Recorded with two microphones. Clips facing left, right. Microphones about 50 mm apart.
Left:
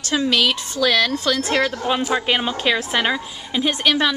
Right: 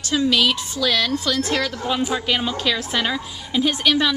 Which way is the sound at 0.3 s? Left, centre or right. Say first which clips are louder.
Even; centre.